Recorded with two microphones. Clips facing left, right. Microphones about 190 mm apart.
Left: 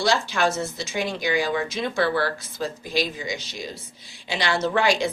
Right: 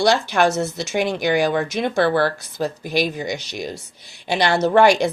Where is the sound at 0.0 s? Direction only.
70° right (ahead or behind).